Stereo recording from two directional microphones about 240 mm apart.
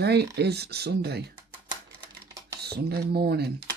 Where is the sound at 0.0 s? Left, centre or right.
Right.